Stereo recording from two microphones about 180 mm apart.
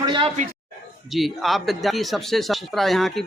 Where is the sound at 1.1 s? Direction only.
Centre (ahead or behind).